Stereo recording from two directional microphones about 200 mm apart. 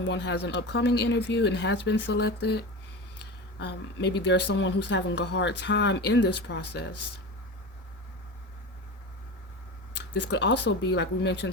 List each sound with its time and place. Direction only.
0.0 s speech: 60° left (ahead or behind)
9.9 s speech: 60° left (ahead or behind)